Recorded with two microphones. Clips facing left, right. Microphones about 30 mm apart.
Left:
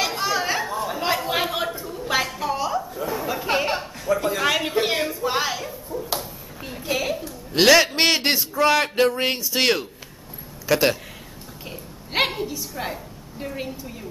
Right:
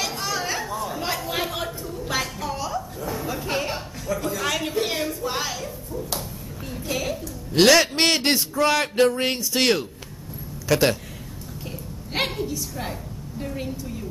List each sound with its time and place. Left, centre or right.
0.0 s chatter: centre
3.1 s chuckle: centre
4.4 s a sound: left
7.5 s speech: centre
12.1 s a sound: centre
13.4 s a woman's voice: centre